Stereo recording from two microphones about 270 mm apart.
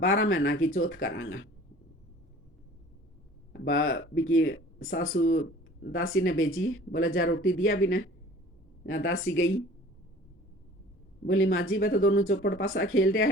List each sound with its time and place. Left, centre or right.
0.0 s speech: left
0.7 s speech: left
1.0 s speech: left
3.5 s speech: left
5.1 s speech: left
5.4 s speech: left
11.3 s speech: left